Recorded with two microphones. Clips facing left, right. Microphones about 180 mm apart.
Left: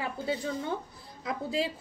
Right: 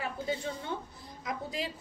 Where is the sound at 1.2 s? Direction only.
30° left (ahead or behind).